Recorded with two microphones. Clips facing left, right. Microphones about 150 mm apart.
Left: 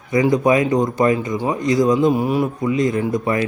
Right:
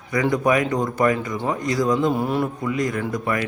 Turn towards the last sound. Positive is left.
turn(degrees=25)  # may be behind; listen again after turning